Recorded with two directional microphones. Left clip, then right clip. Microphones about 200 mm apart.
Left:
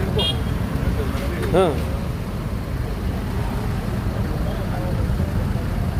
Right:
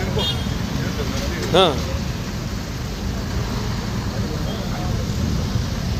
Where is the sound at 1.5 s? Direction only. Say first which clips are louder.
Right 3 dB; centre (ahead or behind).